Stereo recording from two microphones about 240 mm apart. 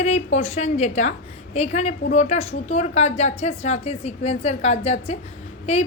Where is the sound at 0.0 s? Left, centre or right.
Left.